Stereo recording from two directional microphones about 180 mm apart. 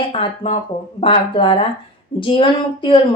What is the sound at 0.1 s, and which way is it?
A woman's voice, 30° left (ahead or behind).